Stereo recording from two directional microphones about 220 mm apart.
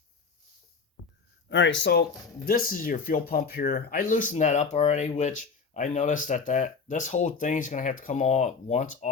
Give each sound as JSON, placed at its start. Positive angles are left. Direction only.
{"t": 1.5, "sound": "speech", "side_deg": 55}
{"t": 2.5, "sound": "speech", "side_deg": 40}